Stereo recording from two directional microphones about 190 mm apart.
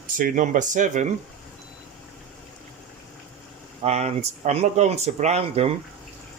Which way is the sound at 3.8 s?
35° right (ahead or behind).